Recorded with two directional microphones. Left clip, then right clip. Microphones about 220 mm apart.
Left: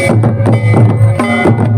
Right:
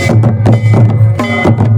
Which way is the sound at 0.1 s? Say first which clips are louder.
Even; 45° right (ahead or behind).